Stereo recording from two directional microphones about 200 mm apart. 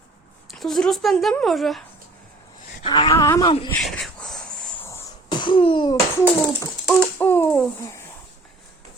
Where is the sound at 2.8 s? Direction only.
25° left (ahead or behind).